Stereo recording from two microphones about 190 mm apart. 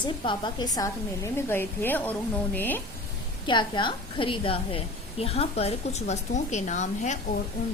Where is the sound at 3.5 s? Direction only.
25° left (ahead or behind).